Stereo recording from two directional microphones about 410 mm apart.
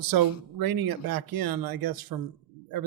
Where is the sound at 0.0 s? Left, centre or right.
Right.